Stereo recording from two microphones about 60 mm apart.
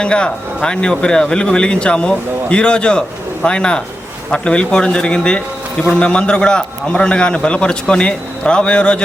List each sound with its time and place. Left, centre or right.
0.0 s a man's voice: centre